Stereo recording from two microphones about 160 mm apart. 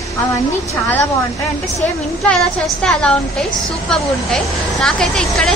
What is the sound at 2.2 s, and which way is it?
Speech, 5° left (ahead or behind).